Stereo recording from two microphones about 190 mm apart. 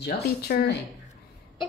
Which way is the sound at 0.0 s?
60° left (ahead or behind).